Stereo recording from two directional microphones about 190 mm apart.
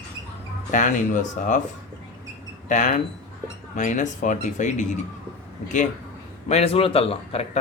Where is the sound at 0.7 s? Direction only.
40° left (ahead or behind).